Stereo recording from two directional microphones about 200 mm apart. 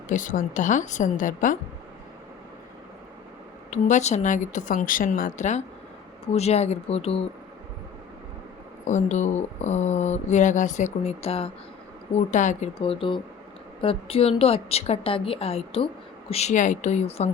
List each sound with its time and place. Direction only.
0.1 s speech: 40° left (ahead or behind)
3.7 s speech: 35° left (ahead or behind)
8.9 s a woman's voice: 35° left (ahead or behind)